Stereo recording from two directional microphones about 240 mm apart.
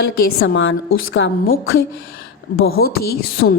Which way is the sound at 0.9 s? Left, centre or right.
Left.